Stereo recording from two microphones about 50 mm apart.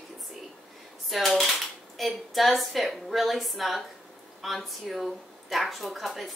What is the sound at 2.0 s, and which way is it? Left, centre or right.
A woman's voice, centre.